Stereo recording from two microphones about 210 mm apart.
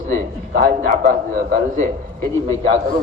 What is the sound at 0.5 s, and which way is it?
A man's voice, 50° right (ahead or behind).